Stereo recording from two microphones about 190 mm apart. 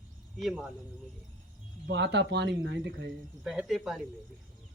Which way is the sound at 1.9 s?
65° right (ahead or behind).